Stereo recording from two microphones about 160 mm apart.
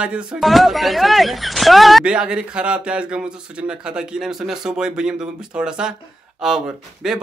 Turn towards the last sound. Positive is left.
turn(degrees=-5)  # may be behind; listen again after turning